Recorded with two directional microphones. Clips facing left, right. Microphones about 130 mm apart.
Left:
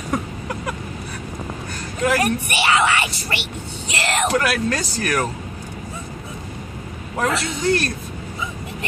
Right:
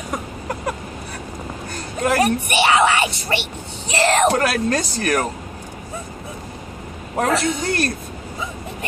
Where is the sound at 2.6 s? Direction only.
35° right (ahead or behind).